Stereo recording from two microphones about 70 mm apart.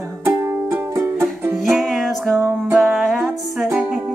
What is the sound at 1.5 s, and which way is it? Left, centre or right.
Music, centre.